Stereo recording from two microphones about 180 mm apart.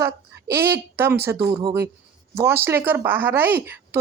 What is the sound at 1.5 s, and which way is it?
Speech, 25° right (ahead or behind).